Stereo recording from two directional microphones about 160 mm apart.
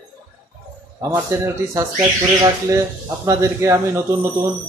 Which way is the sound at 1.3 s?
15° right (ahead or behind).